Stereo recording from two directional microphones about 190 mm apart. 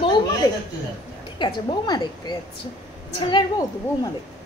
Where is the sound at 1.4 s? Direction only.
25° left (ahead or behind).